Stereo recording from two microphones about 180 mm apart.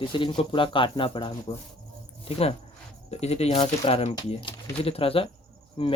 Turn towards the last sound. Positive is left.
turn(degrees=30)  # may be behind; listen again after turning